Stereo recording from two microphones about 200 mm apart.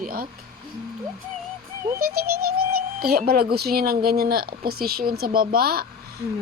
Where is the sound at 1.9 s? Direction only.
50° right (ahead or behind).